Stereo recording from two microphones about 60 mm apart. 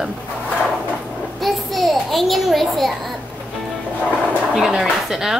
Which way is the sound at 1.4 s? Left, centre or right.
Centre.